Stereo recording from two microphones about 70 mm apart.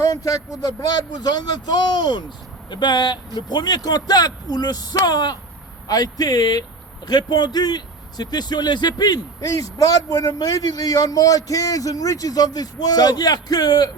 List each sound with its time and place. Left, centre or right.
0.0 s speech: left
7.1 s speech: left